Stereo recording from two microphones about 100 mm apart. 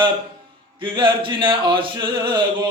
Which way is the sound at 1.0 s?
55° right (ahead or behind).